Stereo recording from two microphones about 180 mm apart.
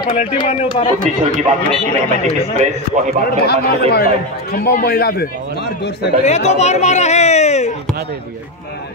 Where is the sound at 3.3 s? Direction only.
60° left (ahead or behind).